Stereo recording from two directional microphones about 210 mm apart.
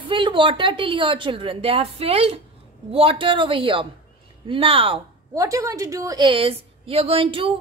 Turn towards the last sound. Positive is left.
turn(degrees=-25)  # may be behind; listen again after turning